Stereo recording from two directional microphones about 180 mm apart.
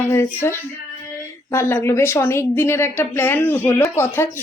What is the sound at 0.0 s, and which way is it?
A woman's voice, 15° left (ahead or behind).